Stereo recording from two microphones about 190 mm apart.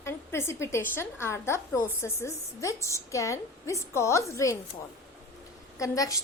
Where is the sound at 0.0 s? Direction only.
15° left (ahead or behind).